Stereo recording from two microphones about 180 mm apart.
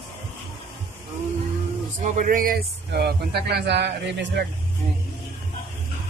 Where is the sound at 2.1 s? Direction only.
45° right (ahead or behind); by 4.5 s 70° right (ahead or behind).